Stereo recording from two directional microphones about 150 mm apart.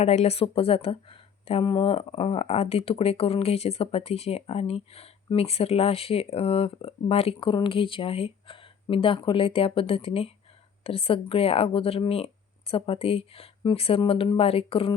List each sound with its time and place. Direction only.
0.0 s speech: 45° left (ahead or behind)